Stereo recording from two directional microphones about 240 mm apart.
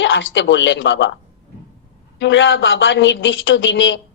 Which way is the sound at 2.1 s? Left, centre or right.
Left.